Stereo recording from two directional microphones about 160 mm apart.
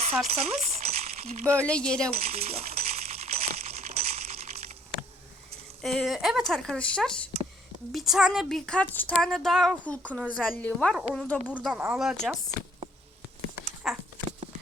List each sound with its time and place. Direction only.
0.3 s speech: 45° right (ahead or behind)
1.6 s a woman's voice: 5° left (ahead or behind)
2.1 s coin: 40° right (ahead or behind)
5.8 s a woman's voice: centre (ahead or behind)
11.4 s a woman's voice: 10° right (ahead or behind)
13.8 s a sound: 5° right (ahead or behind)